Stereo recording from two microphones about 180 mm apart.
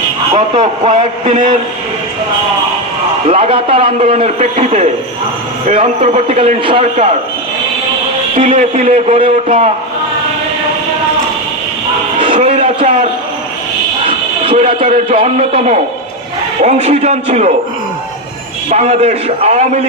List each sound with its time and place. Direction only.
0.9 s a man's voice: 40° right (ahead or behind)
3.2 s a man's voice: 30° right (ahead or behind)
8.5 s a man's voice: 40° right (ahead or behind)
12.4 s a sound: 40° right (ahead or behind)
14.4 s a man's voice: 35° right (ahead or behind)
18.7 s a man's voice: 40° right (ahead or behind)